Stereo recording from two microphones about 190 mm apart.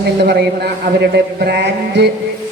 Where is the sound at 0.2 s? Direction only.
55° right (ahead or behind).